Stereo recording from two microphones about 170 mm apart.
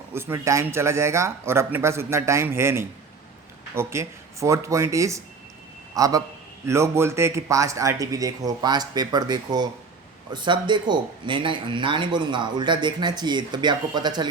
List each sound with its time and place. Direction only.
0.1 s speech: 15° right (ahead or behind)